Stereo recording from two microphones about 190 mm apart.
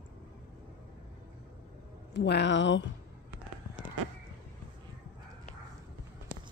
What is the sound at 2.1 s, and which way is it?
Speech, 65° left (ahead or behind).